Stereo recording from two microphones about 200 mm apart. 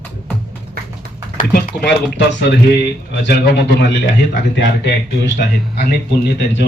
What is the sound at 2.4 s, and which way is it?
Speech, 60° left (ahead or behind).